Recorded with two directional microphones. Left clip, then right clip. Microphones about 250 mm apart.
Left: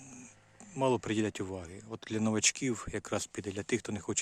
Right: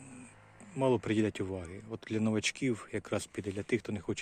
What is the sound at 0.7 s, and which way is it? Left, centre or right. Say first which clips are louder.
Speech: right 1 dB; centre.